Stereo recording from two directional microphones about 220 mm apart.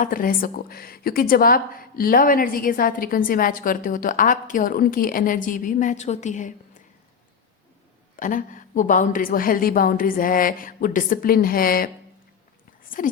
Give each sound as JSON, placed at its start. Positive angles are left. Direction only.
{"t": 0.0, "sound": "a woman's voice", "side_deg": 40}
{"t": 8.1, "sound": "a woman's voice", "side_deg": 35}
{"t": 13.0, "sound": "a woman's voice", "side_deg": 40}